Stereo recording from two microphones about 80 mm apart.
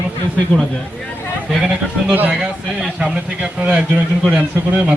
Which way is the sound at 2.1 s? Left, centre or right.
Centre.